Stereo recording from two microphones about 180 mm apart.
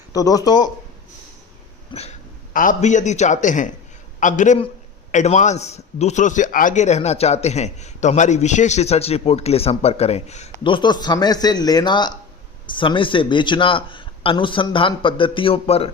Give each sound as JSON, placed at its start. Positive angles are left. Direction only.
{"t": 0.1, "sound": "a man's voice", "side_deg": 20}
{"t": 1.9, "sound": "a man's voice", "side_deg": 35}
{"t": 10.6, "sound": "a man's voice", "side_deg": 25}